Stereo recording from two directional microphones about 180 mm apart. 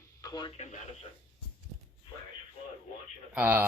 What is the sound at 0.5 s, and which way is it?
Radio, 40° left (ahead or behind).